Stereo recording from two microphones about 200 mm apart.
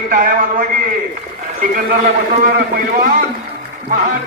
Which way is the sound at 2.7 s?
45° right (ahead or behind).